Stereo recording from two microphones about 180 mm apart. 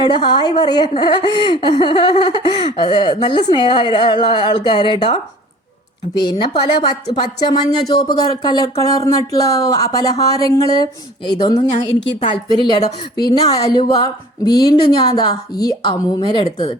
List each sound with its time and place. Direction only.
0.1 s a woman's voice: 25° left (ahead or behind)
6.1 s a woman's voice: 25° left (ahead or behind)